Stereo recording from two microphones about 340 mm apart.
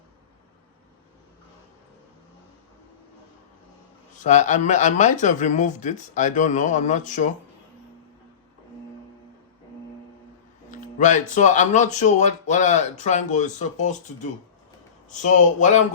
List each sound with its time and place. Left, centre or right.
4.2 s speech: left
10.7 s speech: left